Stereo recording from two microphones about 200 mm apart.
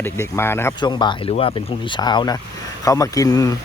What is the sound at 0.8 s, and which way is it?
Speech, 20° left (ahead or behind).